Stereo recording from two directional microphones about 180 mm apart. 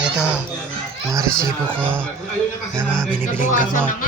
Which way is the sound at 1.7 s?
10° right (ahead or behind).